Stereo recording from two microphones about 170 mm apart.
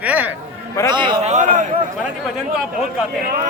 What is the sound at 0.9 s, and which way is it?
Speech, 25° right (ahead or behind).